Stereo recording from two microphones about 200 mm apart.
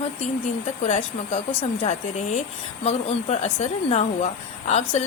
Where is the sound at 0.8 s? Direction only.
30° left (ahead or behind).